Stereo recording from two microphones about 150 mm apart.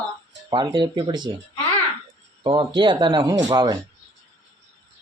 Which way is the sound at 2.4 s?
35° right (ahead or behind).